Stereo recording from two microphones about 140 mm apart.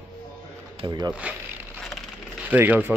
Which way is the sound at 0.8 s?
30° right (ahead or behind).